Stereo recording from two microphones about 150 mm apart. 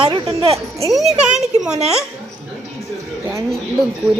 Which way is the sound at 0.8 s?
Centre (ahead or behind).